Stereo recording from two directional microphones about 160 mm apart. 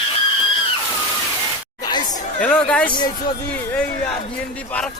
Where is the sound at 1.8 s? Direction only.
25° left (ahead or behind).